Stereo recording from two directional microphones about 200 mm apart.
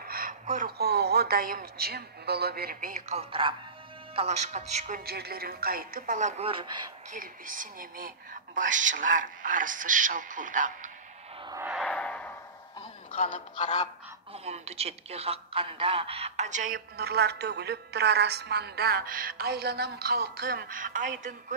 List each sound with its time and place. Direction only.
0.0 s a woman's voice: 45° right (ahead or behind); by 6.9 s 25° right (ahead or behind)
7.1 s a woman's voice: 40° right (ahead or behind)
11.4 s a sound: 15° right (ahead or behind)
11.7 s a sound: 5° left (ahead or behind)
13.3 s speech: 35° left (ahead or behind)
14.3 s speech: 30° right (ahead or behind)